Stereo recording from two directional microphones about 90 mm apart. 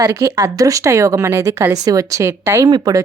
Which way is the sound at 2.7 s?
45° right (ahead or behind).